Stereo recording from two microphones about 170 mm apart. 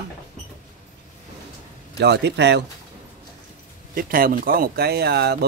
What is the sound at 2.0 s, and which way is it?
Speech, 85° right.